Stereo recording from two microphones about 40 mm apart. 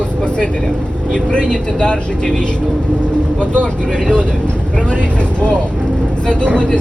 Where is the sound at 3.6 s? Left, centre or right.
Left.